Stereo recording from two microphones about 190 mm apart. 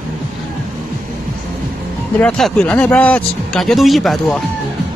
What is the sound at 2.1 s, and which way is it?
Speech, 5° left (ahead or behind).